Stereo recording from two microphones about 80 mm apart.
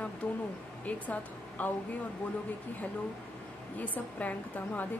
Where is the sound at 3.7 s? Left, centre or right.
Left.